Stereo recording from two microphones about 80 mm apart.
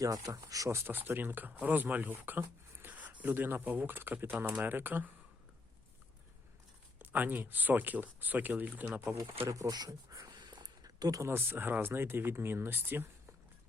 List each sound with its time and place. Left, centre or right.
0.0 s speech: right
7.0 s speech: right
9.5 s speech: right
10.1 s a sound: right
11.3 s speech: right